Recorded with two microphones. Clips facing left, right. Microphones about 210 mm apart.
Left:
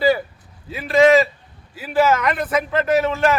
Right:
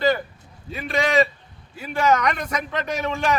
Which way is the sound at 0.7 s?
Centre (ahead or behind).